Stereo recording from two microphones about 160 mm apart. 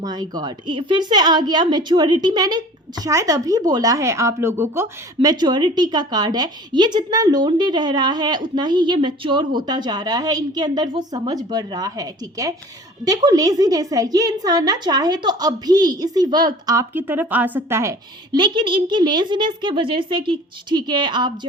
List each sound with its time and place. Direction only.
0.0 s a woman's voice: 25° right (ahead or behind)
16.9 s a woman's voice: 10° right (ahead or behind)
18.3 s a woman's voice: 30° right (ahead or behind)